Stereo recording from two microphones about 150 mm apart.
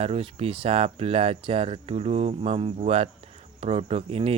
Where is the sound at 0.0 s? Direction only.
40° right (ahead or behind).